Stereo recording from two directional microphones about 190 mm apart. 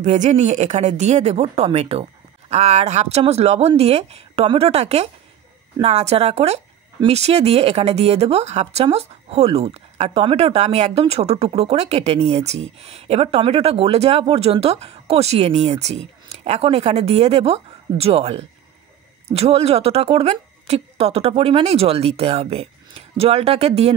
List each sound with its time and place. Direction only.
0.0 s speech: 35° right (ahead or behind)